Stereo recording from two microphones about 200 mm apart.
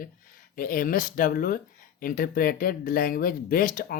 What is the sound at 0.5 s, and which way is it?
Speech, 45° left (ahead or behind).